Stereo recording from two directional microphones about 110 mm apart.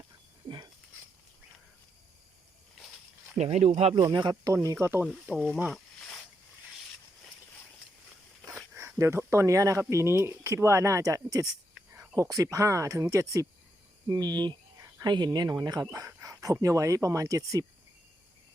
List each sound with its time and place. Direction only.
0.4 s a sound: 40° right (ahead or behind)
3.3 s speech: 85° right
4.0 s speech: 40° right (ahead or behind)
4.5 s speech: 30° right (ahead or behind)
5.3 s speech: 5° right (ahead or behind)
5.6 s a sound: 5° left (ahead or behind)
8.7 s speech: 25° right (ahead or behind)